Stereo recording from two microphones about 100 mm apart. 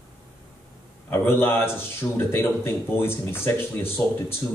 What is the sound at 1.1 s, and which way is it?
A man's voice, 25° left (ahead or behind).